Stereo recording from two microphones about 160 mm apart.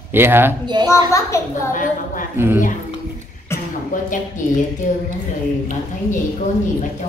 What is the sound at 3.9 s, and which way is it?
A woman's voice, 55° left (ahead or behind).